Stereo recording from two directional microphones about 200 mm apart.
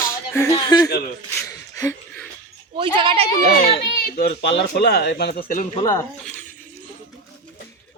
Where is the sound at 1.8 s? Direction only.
15° left (ahead or behind).